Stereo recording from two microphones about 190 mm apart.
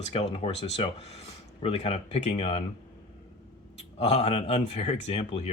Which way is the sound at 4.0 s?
35° left (ahead or behind).